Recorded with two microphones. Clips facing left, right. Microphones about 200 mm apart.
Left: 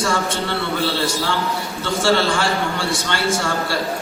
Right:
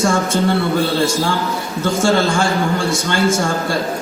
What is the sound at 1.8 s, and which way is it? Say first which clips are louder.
A man's voice: right 3 dB; 45° right (ahead or behind).